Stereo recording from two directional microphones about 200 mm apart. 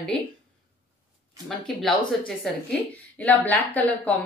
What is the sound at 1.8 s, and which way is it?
Speech, centre (ahead or behind).